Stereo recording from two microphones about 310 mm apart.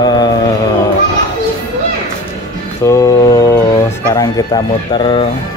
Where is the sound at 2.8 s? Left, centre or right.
Centre.